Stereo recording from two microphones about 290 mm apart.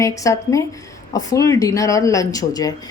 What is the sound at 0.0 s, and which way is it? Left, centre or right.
A woman's voice, centre.